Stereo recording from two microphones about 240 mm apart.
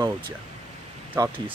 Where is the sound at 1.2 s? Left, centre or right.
Centre.